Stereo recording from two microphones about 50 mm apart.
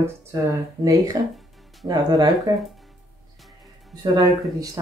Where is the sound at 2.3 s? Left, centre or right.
Centre.